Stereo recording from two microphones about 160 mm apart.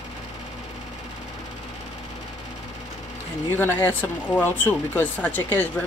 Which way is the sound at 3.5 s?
15° left (ahead or behind).